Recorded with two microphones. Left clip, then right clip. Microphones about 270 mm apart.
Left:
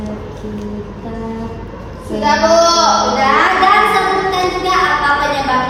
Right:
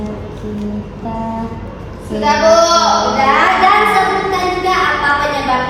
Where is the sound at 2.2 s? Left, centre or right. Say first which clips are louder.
Right 1 dB; left.